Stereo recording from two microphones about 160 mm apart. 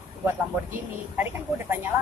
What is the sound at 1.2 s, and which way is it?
Speech, 15° right (ahead or behind).